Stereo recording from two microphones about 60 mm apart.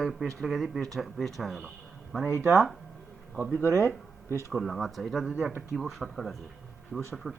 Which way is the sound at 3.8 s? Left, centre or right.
Left.